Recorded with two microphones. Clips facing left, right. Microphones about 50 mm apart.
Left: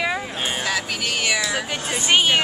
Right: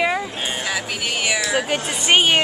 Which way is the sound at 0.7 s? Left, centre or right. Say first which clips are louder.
Even; centre.